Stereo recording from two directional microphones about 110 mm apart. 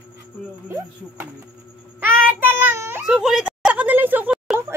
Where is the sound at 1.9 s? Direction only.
20° right (ahead or behind).